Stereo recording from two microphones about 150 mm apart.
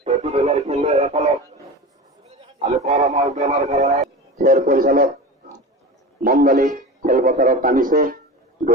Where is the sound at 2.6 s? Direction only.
50° right (ahead or behind); by 5.0 s 70° right (ahead or behind).